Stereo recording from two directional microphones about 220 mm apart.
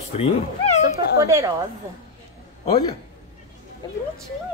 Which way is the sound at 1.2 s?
15° right (ahead or behind).